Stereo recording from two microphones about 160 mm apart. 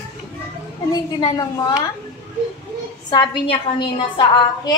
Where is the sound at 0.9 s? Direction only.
20° left (ahead or behind).